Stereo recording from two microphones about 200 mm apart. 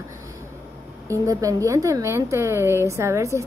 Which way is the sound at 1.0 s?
15° right (ahead or behind).